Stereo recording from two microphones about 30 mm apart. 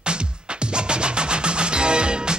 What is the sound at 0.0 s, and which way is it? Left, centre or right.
Music, right.